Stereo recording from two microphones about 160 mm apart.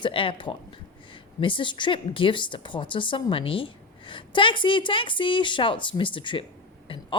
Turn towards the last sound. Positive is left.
turn(degrees=35)  # may be behind; listen again after turning